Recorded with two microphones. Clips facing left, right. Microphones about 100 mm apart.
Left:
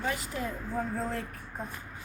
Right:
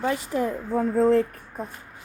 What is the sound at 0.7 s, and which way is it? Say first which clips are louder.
Speech: right 15 dB; 90° right.